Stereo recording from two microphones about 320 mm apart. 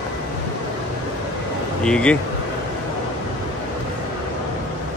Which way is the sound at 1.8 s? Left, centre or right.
Centre.